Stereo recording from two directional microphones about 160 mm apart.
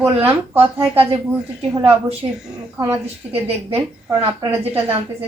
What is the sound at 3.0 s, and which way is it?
Speech, 40° right (ahead or behind).